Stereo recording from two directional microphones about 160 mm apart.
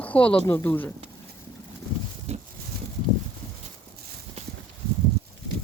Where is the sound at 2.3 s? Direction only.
40° right (ahead or behind).